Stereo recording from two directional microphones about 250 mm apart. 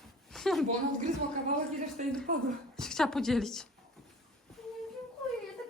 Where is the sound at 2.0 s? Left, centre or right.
Right.